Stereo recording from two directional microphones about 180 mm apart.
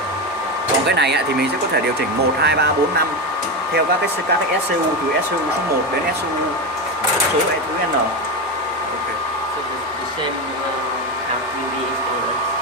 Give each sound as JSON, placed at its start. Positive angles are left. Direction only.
{"t": 0.9, "sound": "speech", "side_deg": -70}